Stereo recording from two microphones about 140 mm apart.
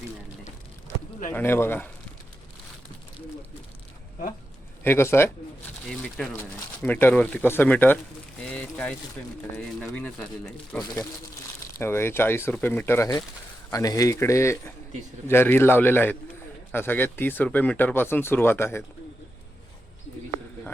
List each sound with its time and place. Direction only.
1.3 s speech: 15° left (ahead or behind)
4.8 s speech: 15° left (ahead or behind)
5.9 s speech: 5° left (ahead or behind)